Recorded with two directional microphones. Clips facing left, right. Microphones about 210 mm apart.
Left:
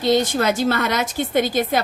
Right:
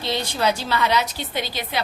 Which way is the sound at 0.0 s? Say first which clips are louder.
Left 5 dB; 45° left (ahead or behind).